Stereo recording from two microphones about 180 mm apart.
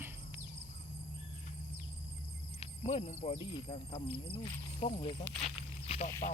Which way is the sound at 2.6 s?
35° left (ahead or behind).